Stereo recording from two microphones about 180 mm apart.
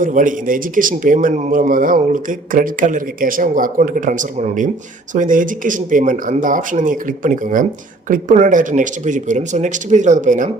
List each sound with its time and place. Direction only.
0.0 s speech: 45° right (ahead or behind)